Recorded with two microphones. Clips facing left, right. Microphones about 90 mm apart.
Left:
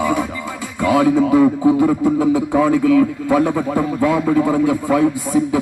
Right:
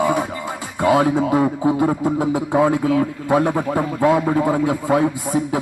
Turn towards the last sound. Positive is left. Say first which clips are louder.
# left 4 dB
turn(degrees=-30)  # may be behind; listen again after turning